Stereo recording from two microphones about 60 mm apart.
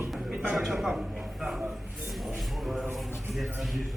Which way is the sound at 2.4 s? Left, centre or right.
Centre.